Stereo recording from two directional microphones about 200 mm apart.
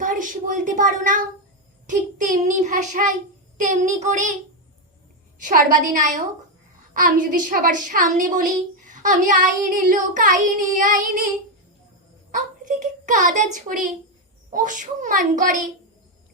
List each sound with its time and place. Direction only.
0.0 s a sound: 40° right (ahead or behind)
1.9 s a woman's voice: 40° right (ahead or behind)
5.4 s a woman's voice: 40° right (ahead or behind)
12.3 s a child's voice: 40° right (ahead or behind)